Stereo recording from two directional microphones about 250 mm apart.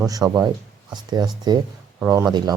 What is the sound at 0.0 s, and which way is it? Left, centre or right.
Speech, centre.